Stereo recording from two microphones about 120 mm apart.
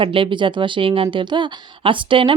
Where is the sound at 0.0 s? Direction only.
45° right (ahead or behind).